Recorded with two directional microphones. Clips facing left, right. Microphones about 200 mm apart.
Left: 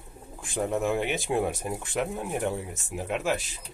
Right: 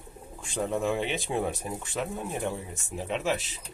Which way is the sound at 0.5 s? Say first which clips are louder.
Left 1 dB; 10° left (ahead or behind).